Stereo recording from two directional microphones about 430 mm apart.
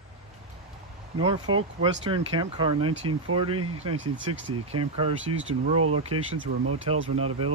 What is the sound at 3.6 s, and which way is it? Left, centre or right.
Speech, right.